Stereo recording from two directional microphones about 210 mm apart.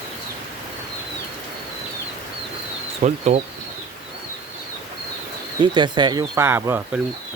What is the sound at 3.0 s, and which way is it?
Speech, 35° right (ahead or behind).